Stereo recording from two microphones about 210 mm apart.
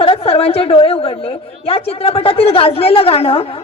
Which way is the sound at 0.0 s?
25° left (ahead or behind).